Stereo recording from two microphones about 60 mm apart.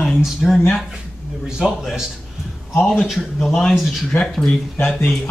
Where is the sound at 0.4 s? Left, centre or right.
Centre.